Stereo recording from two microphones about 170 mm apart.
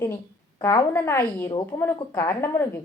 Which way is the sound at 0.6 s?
15° left (ahead or behind).